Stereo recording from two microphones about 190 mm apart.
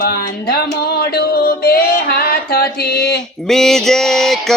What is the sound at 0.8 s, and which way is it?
Music, 55° left (ahead or behind).